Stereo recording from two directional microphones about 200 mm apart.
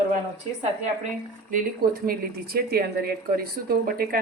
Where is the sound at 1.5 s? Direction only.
45° right (ahead or behind).